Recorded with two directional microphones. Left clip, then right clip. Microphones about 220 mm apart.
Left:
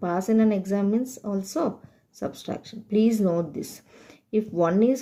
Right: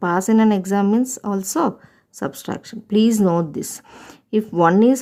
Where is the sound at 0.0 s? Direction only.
35° right (ahead or behind).